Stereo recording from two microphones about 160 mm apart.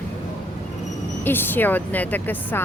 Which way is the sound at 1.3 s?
10° left (ahead or behind).